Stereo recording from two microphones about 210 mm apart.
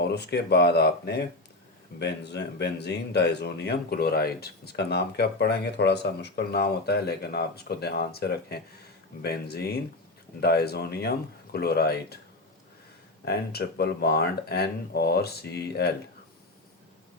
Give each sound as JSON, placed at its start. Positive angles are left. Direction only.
{"t": 0.0, "sound": "speech", "side_deg": 50}
{"t": 13.2, "sound": "speech", "side_deg": 50}